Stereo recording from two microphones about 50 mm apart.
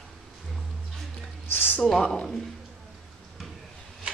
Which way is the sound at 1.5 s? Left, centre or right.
Left.